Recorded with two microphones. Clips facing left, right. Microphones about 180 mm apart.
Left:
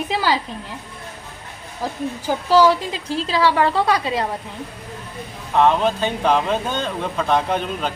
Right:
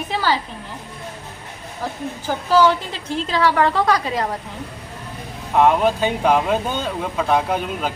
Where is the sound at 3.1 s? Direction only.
35° left (ahead or behind).